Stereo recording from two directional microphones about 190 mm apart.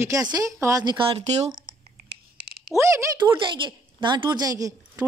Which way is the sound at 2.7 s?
15° right (ahead or behind).